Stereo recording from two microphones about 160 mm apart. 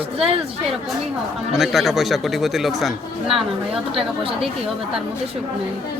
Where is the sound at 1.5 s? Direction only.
Centre (ahead or behind).